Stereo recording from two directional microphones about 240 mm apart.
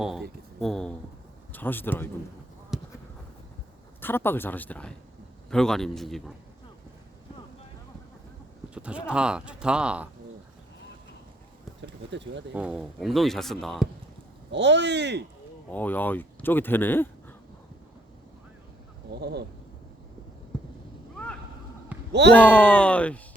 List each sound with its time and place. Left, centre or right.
0.0 s speech: centre
2.7 s a sound: centre
4.0 s speech: centre
8.7 s speech: centre
11.8 s a sound: right
12.5 s speech: centre
14.5 s speech: right
15.7 s speech: centre
19.2 s speech: right
22.1 s speech: right
22.4 s speech: centre